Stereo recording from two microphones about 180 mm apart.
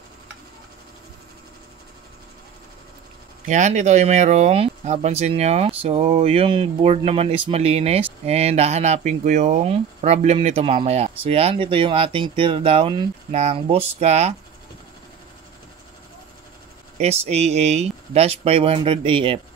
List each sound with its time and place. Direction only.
3.4 s speech: 40° right (ahead or behind)
17.0 s speech: 35° right (ahead or behind)